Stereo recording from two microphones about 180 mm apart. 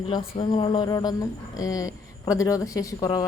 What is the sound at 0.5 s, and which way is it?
Speech, 25° left (ahead or behind).